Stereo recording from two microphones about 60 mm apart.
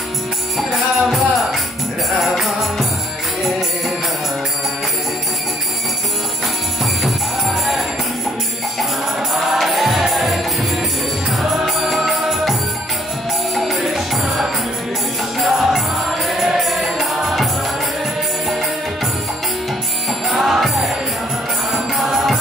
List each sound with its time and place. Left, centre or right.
0.6 s music: centre
7.4 s music: centre
9.3 s music: centre
11.6 s music: centre
13.6 s music: centre
20.2 s music: centre